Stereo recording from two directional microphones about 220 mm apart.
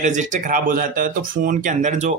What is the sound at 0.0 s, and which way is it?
Speech, 35° right (ahead or behind).